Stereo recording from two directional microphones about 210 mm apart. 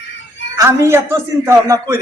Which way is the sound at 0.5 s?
15° right (ahead or behind).